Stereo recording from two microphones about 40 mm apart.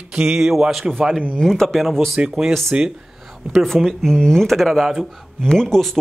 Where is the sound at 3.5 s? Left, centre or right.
Centre.